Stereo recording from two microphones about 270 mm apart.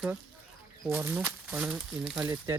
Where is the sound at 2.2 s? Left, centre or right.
Centre.